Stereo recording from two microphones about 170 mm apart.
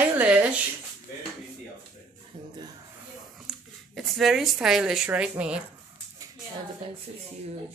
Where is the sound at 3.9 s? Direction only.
Centre (ahead or behind).